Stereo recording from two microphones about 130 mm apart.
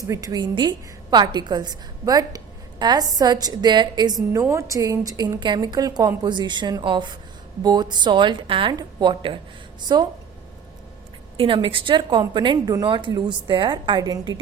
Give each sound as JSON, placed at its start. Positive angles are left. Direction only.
{"t": 0.1, "sound": "a woman's voice", "side_deg": -25}
{"t": 4.3, "sound": "a woman's voice", "side_deg": -20}
{"t": 11.3, "sound": "a woman's voice", "side_deg": -40}